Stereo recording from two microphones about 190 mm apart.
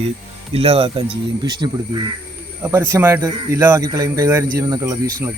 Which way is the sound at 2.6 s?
15° right (ahead or behind).